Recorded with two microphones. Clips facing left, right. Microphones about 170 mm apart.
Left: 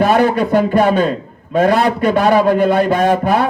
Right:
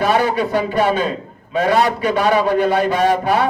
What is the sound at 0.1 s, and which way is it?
A man's voice, 50° left (ahead or behind).